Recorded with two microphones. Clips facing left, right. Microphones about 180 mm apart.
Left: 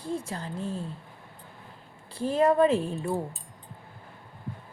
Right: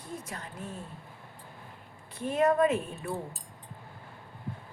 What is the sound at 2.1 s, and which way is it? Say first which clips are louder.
Speech: left 3 dB; 30° left (ahead or behind).